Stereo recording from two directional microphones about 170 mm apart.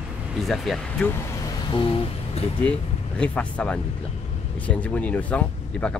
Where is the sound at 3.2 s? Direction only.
5° left (ahead or behind).